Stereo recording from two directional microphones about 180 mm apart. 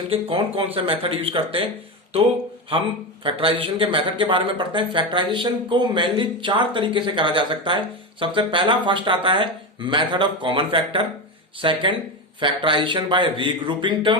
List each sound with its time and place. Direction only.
0.1 s speech: 30° right (ahead or behind)
3.2 s speech: 30° right (ahead or behind)